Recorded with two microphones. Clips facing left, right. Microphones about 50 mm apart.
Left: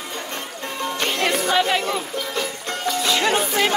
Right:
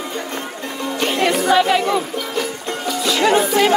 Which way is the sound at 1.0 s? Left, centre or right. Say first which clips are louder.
Right 5 dB; right.